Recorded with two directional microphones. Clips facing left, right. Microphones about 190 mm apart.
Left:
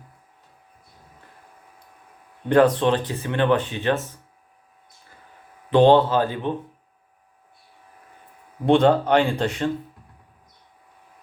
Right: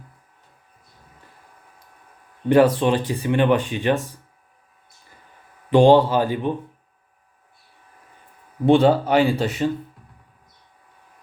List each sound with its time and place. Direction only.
2.5 s speech: 10° right (ahead or behind)
5.7 s speech: 10° right (ahead or behind)
8.6 s speech: 5° right (ahead or behind)